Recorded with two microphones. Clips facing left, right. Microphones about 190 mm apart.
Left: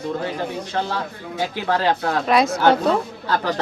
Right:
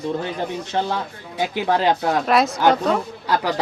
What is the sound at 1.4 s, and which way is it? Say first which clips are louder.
Speech: right 2 dB; 15° right (ahead or behind).